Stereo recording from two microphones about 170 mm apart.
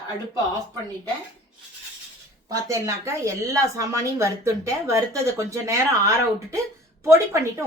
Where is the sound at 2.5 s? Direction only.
20° right (ahead or behind).